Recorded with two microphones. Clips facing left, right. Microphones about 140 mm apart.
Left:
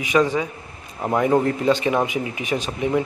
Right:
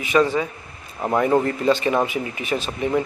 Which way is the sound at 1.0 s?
Centre (ahead or behind).